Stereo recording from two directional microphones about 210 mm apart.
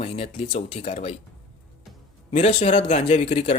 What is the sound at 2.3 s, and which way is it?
Speech, 30° left (ahead or behind).